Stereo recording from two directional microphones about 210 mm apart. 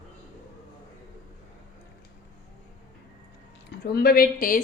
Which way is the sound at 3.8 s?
50° left (ahead or behind).